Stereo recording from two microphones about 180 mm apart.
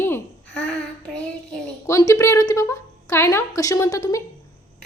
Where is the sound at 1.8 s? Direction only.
15° left (ahead or behind).